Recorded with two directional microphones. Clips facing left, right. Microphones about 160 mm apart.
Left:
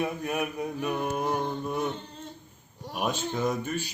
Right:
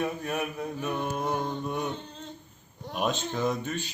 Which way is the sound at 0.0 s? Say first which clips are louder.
Left 1 dB; 10° left (ahead or behind).